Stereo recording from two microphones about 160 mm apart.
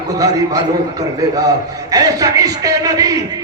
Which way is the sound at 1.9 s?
25° right (ahead or behind).